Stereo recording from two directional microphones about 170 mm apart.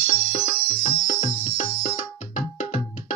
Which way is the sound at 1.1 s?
45° left (ahead or behind).